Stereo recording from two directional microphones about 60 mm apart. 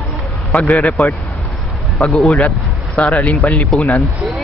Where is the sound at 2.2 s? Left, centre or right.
Centre.